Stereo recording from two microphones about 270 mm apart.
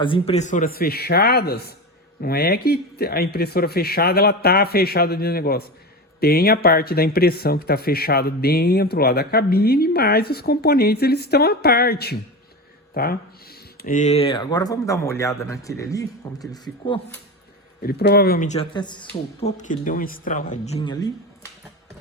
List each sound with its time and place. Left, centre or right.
0.0 s speech: centre
17.8 s speech: left; by 21.1 s centre